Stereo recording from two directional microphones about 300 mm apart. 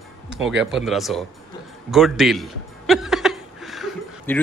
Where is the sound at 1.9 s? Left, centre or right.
Centre.